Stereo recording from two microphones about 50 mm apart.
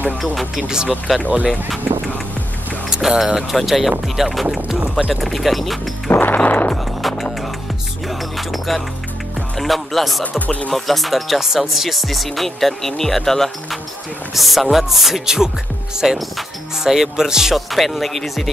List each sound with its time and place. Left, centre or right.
0.2 s speech: centre
2.9 s music: centre
3.5 s speech: centre
6.0 s music: left
6.8 s skateboard: centre
8.1 s music: centre
10.4 s speech: left
10.7 s speech: centre